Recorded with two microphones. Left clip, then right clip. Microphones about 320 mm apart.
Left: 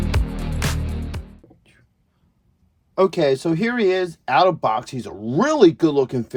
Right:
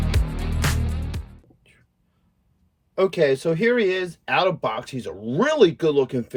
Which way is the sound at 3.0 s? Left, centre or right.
Centre.